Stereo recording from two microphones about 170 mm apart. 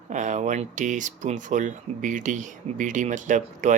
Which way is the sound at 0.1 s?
45° right (ahead or behind).